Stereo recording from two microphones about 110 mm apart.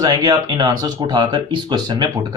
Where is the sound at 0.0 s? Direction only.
35° right (ahead or behind).